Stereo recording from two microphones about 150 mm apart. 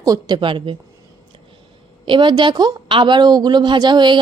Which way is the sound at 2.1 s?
30° right (ahead or behind).